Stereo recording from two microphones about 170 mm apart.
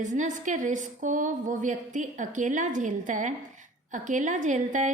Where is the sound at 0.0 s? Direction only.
45° right (ahead or behind).